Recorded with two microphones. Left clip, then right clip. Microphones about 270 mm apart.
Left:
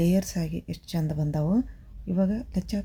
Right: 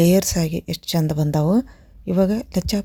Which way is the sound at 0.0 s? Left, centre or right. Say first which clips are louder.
Right 10 dB; right.